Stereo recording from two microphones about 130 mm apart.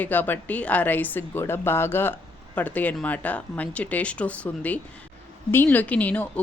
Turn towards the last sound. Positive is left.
turn(degrees=10)  # may be behind; listen again after turning